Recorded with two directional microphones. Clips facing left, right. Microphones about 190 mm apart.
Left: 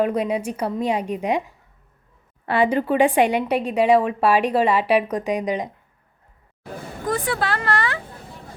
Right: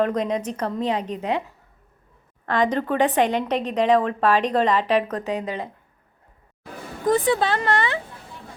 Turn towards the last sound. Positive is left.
turn(degrees=-20)  # may be behind; listen again after turning